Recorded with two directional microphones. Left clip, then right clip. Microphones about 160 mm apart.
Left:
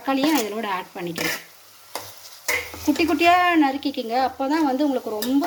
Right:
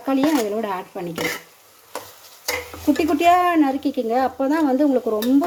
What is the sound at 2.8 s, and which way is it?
Speech, 45° right (ahead or behind).